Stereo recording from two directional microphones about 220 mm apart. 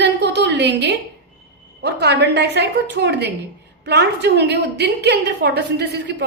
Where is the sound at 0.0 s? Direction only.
50° right (ahead or behind).